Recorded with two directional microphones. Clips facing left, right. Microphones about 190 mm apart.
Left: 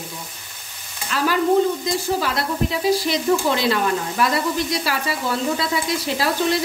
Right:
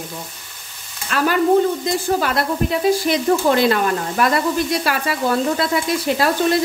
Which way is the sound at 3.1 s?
50° right (ahead or behind).